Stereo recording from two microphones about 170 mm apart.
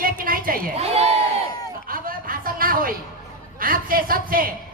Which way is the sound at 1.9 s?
55° right (ahead or behind).